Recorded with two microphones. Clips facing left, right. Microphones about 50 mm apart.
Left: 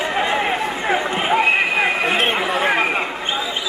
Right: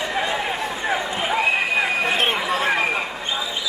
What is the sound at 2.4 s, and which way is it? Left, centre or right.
Chatter, centre.